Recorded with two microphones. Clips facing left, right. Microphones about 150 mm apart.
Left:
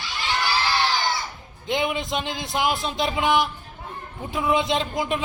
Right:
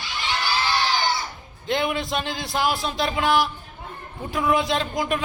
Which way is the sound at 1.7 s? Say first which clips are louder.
Right 1 dB; 15° left (ahead or behind).